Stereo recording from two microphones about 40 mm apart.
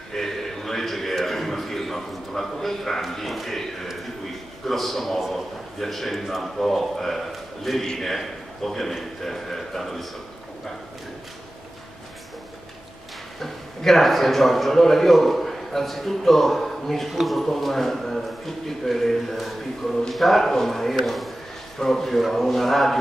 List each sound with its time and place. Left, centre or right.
0.1 s a man's voice: centre
7.8 s a man's voice: centre
8.1 s a man's voice: centre
13.4 s a man's voice: centre